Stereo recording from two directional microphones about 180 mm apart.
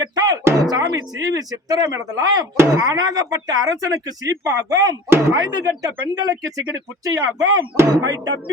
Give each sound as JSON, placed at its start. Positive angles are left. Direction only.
{"t": 0.0, "sound": "music", "side_deg": -20}
{"t": 0.7, "sound": "speech", "side_deg": -20}